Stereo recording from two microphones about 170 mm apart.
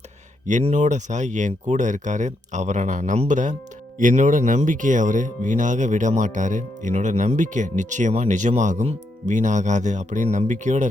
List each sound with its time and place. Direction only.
0.4 s speech: 40° right (ahead or behind)